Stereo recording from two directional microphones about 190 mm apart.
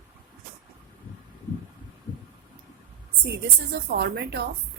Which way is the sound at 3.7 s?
55° right (ahead or behind).